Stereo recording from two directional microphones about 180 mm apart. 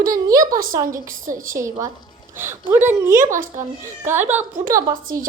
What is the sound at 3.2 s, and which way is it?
Speech, 45° right (ahead or behind).